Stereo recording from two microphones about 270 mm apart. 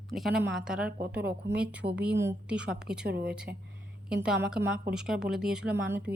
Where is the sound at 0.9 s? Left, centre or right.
Right.